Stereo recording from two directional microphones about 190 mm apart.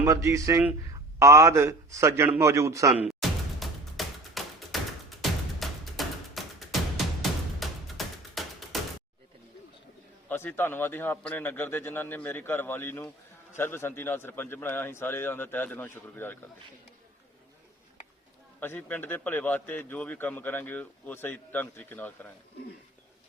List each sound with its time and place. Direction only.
0.0 s a man's voice: 15° right (ahead or behind)
3.1 s thump: centre (ahead or behind)
5.5 s music: centre (ahead or behind)
10.2 s a man's voice: 10° left (ahead or behind)
18.6 s a man's voice: 10° left (ahead or behind)